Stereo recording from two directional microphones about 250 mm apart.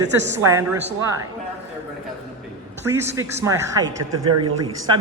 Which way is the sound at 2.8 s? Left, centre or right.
Centre.